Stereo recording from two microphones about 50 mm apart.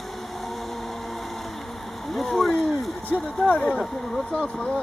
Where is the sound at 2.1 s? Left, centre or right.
Centre.